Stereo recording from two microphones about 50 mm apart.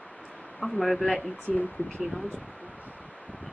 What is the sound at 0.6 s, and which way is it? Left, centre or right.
Speech, centre.